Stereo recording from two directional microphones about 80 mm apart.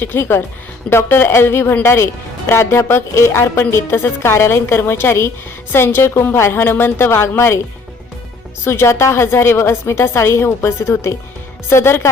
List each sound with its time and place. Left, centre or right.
0.0 s a woman's voice: left
8.6 s a woman's voice: left